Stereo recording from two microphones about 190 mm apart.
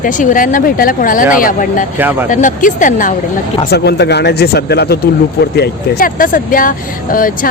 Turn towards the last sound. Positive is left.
turn(degrees=45)  # may be behind; listen again after turning